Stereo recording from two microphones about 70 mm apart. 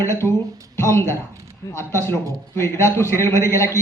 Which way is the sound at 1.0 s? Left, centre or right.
Right.